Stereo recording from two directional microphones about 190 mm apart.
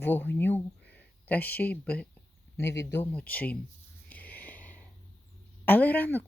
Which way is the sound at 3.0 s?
10° left (ahead or behind).